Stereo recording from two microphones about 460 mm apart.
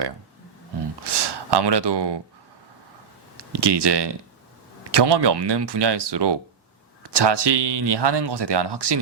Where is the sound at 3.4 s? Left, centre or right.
Right.